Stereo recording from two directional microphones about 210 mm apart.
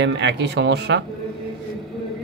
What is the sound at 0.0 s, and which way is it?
Speech, 55° right (ahead or behind).